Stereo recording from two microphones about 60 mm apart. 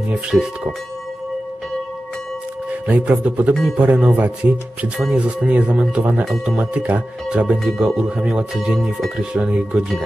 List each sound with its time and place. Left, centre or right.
0.1 s speech: centre
2.9 s speech: right